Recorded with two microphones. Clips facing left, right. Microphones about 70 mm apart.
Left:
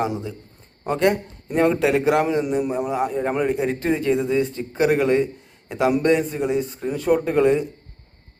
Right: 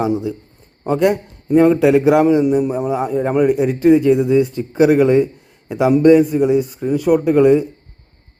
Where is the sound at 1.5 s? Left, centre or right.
Centre.